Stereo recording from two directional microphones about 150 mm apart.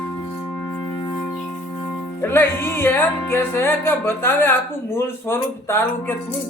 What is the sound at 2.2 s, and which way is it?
Music, 15° left (ahead or behind).